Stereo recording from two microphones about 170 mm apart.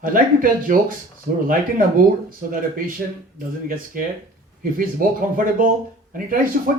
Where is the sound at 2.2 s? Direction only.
55° right (ahead or behind).